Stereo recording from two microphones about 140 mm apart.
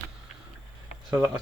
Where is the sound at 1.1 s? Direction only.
10° right (ahead or behind).